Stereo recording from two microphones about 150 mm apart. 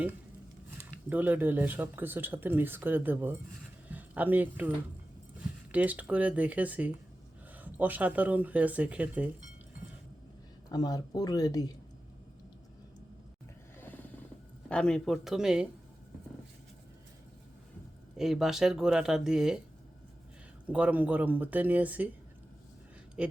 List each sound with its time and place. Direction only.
0.8 s speech: 10° right (ahead or behind)
5.7 s speech: 10° right (ahead or behind)
10.7 s speech: 25° left (ahead or behind)
14.7 s speech: 5° left (ahead or behind)
18.2 s speech: 5° right (ahead or behind)
20.7 s speech: 10° right (ahead or behind)
23.2 s speech: 5° right (ahead or behind)